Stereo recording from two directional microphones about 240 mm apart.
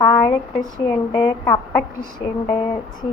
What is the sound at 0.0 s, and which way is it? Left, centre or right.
Speech, centre.